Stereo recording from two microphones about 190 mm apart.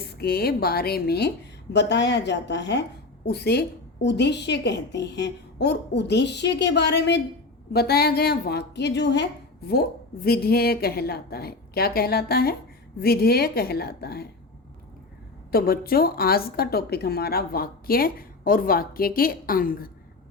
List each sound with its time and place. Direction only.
0.2 s a woman's voice: 55° left (ahead or behind)
15.5 s a woman's voice: 50° left (ahead or behind)